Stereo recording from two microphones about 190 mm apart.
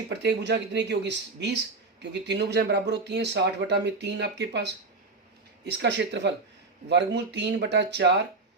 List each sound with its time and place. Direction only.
0.1 s speech: 65° right (ahead or behind)
5.8 s speech: 65° right (ahead or behind)